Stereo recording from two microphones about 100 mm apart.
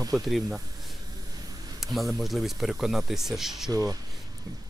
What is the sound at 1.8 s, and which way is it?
Speech, centre (ahead or behind).